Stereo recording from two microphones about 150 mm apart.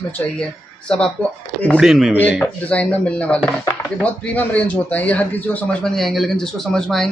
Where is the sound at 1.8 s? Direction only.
5° right (ahead or behind).